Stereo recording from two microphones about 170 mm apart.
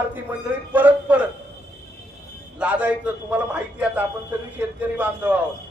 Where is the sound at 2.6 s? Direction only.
10° right (ahead or behind).